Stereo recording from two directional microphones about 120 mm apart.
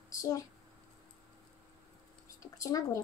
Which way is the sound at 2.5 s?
30° left (ahead or behind).